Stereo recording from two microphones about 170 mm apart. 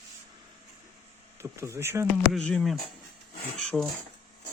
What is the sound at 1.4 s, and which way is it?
Speech, 15° right (ahead or behind).